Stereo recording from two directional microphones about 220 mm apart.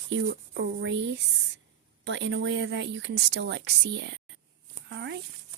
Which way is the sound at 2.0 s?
55° right (ahead or behind).